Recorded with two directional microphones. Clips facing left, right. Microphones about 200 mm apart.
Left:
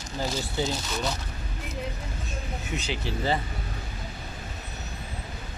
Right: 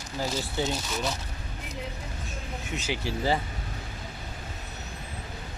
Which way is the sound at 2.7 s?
10° right (ahead or behind).